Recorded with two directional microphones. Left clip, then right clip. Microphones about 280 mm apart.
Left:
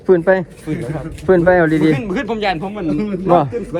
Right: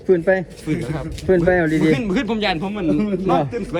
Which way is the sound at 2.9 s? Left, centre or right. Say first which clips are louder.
Right 1 dB; left.